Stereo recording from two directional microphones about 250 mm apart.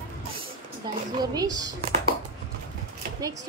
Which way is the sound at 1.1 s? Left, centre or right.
Centre.